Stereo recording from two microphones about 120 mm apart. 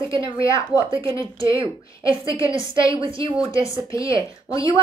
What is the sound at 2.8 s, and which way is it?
Speech, 45° right (ahead or behind).